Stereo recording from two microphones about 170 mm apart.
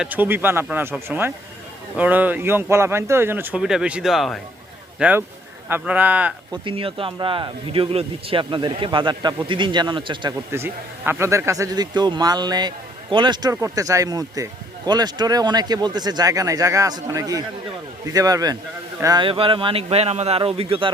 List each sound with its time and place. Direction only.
0.0 s speech: 10° right (ahead or behind)
6.5 s speech: 30° right (ahead or behind)
10.5 s speech: 15° right (ahead or behind); by 20.9 s 35° right (ahead or behind)